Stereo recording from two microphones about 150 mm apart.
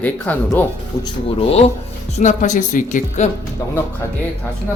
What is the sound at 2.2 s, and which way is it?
Speech, 55° left (ahead or behind).